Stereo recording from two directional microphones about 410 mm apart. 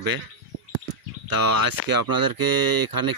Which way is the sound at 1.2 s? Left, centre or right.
Right.